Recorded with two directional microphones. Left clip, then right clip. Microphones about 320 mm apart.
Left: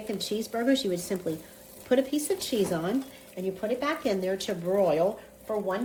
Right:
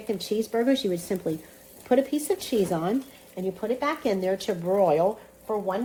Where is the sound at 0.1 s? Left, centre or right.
Centre.